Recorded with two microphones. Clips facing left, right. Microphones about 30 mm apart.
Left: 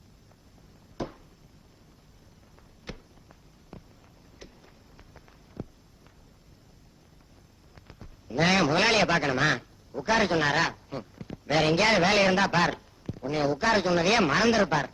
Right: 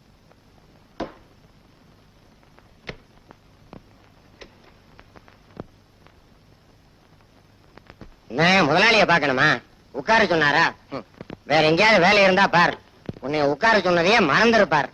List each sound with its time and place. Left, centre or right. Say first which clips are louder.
0.9 s chop: right 4 dB; right
2.8 s a sound: right 6 dB; right
7.8 s a man's voice: right 5 dB; right